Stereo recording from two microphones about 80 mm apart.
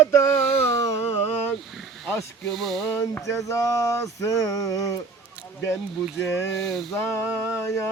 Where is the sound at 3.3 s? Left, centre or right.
Left.